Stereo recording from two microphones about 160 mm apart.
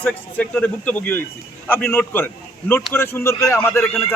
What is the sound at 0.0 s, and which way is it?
A man's voice, 10° left (ahead or behind).